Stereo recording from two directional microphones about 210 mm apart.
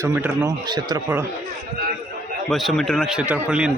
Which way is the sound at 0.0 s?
15° right (ahead or behind).